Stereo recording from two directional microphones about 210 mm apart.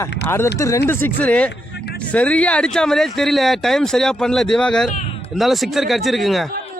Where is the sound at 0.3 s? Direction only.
10° left (ahead or behind).